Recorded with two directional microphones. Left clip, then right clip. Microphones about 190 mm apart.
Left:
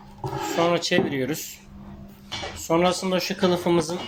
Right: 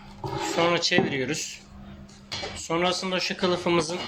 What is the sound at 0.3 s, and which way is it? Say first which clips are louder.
Speech: left 1 dB; 15° left (ahead or behind).